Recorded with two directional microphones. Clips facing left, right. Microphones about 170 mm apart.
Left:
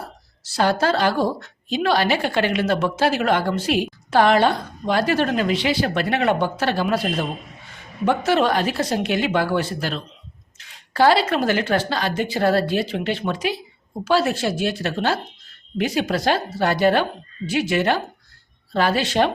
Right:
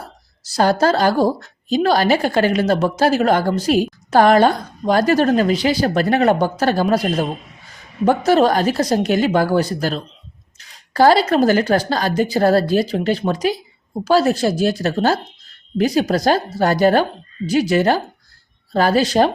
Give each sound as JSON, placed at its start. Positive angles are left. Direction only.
{"t": 0.4, "sound": "a woman's voice", "side_deg": -40}